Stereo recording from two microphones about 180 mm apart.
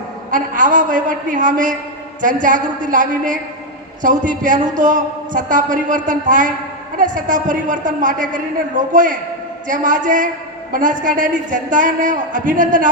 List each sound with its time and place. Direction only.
0.3 s a man's voice: 45° right (ahead or behind)